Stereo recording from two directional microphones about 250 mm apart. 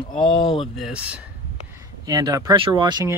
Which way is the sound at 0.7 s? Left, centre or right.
Centre.